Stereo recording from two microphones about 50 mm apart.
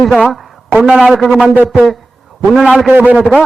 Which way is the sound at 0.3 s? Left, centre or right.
Centre.